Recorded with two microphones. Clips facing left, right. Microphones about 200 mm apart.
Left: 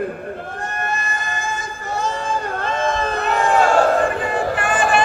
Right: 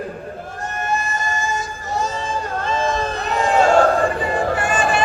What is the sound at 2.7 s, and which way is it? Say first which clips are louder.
Crowd: even; 60° left (ahead or behind).